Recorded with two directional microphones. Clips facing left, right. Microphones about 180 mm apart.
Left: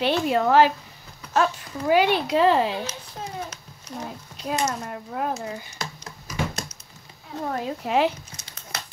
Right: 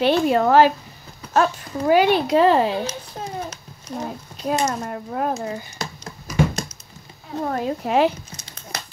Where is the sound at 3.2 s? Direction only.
45° right (ahead or behind).